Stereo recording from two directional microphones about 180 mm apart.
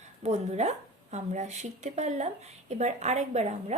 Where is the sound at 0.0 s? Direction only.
40° right (ahead or behind).